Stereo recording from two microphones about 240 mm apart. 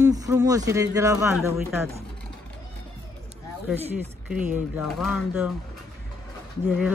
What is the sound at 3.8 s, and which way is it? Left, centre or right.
Speech, centre.